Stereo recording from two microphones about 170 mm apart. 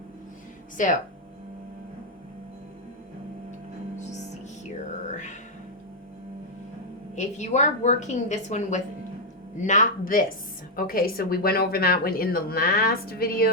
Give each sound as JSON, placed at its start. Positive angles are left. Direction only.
{"t": 0.8, "sound": "a woman's voice", "side_deg": 50}
{"t": 5.1, "sound": "music", "side_deg": 45}
{"t": 7.2, "sound": "a woman's voice", "side_deg": 45}